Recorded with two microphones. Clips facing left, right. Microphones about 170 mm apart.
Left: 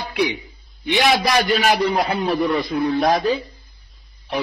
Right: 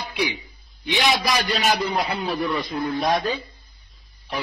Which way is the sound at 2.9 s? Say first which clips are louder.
Left 3 dB; centre (ahead or behind).